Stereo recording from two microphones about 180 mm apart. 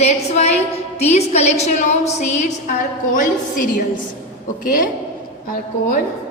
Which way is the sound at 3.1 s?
45° left (ahead or behind).